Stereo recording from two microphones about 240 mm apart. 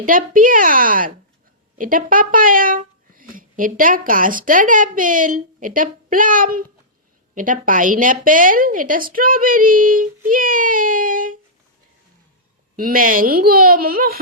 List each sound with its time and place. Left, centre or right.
0.0 s speech: right
12.7 s speech: right